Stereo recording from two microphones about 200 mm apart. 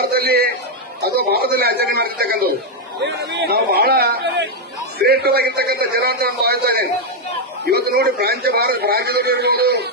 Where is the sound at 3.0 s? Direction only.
60° right (ahead or behind).